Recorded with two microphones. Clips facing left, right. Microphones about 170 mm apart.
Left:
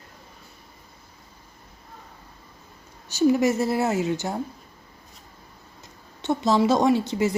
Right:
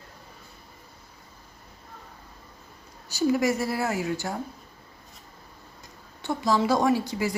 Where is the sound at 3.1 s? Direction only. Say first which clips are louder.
Left 4 dB; 20° left (ahead or behind).